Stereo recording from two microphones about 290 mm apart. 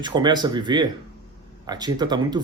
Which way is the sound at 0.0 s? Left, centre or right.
Centre.